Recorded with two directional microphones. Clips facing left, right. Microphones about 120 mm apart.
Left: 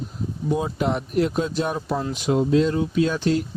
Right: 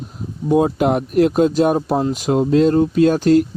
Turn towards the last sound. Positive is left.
turn(degrees=-45)  # may be behind; listen again after turning